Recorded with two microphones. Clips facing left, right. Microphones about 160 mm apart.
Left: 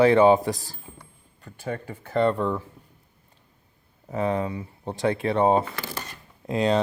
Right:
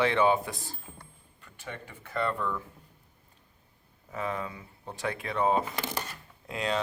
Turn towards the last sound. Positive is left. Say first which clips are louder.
# left 9 dB
turn(degrees=35)  # may be behind; listen again after turning